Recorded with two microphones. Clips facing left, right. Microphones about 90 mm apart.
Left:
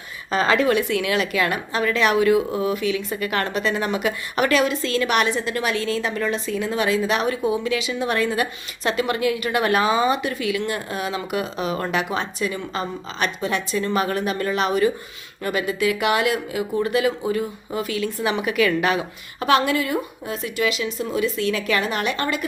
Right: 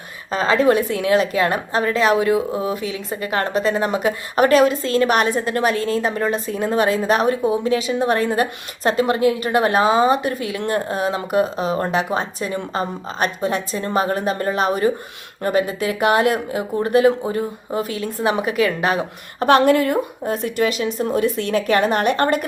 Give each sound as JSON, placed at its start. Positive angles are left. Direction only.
{"t": 0.3, "sound": "a woman's voice", "side_deg": -35}